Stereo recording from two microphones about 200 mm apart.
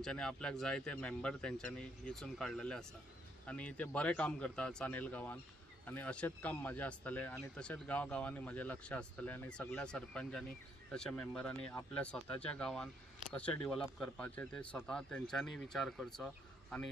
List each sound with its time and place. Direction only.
0.0 s speech: 5° left (ahead or behind)